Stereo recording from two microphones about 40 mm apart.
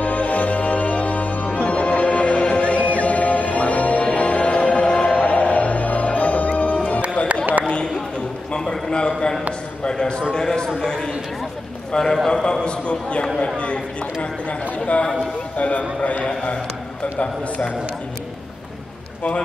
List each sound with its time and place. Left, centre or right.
0.0 s music: left
7.6 s a sound: left
11.9 s a man's voice: centre
12.6 s a man's voice: left
15.5 s a sound: left
17.2 s a man's voice: left